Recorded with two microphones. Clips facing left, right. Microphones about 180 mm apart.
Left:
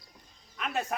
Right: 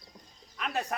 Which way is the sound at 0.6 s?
Centre (ahead or behind).